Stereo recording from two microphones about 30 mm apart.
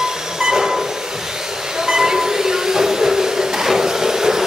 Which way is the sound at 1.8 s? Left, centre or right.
Right.